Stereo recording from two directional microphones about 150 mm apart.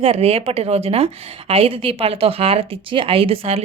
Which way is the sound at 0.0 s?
40° right (ahead or behind).